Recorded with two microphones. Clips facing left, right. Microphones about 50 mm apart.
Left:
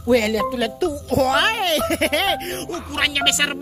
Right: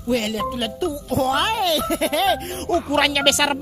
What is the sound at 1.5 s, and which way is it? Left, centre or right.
Speech, left.